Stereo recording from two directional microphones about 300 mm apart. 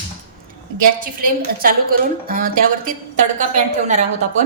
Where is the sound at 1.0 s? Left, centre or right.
Right.